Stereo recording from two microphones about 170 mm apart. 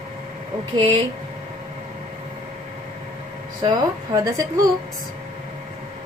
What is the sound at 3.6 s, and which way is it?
Speech, 25° right (ahead or behind).